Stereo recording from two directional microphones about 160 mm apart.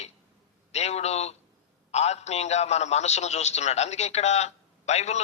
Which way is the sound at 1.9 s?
45° left (ahead or behind).